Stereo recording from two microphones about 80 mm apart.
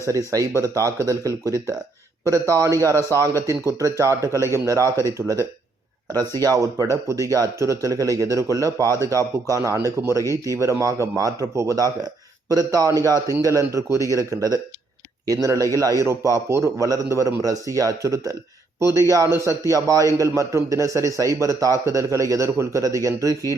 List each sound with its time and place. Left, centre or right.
0.6 s a man's voice: right
6.1 s a man's voice: right
6.6 s a man's voice: right